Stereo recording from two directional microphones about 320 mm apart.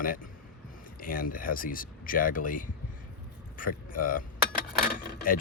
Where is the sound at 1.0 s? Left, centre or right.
Left.